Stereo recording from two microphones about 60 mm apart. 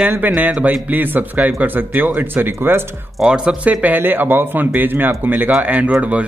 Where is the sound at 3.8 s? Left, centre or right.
Right.